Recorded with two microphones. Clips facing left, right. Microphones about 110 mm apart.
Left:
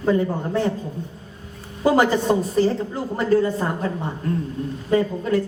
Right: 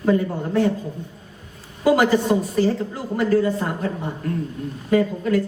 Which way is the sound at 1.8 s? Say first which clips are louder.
Right 1 dB; 30° left (ahead or behind).